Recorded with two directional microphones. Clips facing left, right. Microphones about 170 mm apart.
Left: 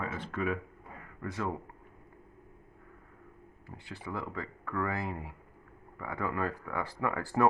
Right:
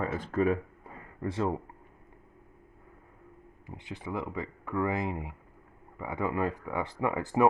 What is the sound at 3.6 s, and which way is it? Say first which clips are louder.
Speech: right 3 dB; 20° right (ahead or behind).